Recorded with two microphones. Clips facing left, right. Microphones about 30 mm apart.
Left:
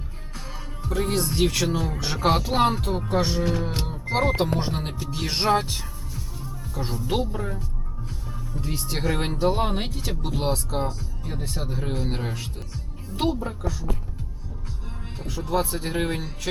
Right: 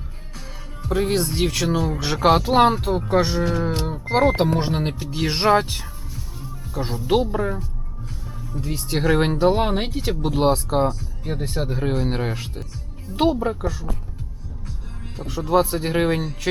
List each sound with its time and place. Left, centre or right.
0.9 s speech: centre
1.3 s speech: centre
2.7 s speech: centre; by 5.0 s right
5.1 s speech: centre
8.5 s speech: centre
8.9 s speech: centre
15.3 s speech: right